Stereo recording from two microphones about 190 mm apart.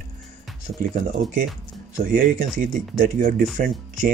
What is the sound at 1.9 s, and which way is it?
Speech, 45° right (ahead or behind).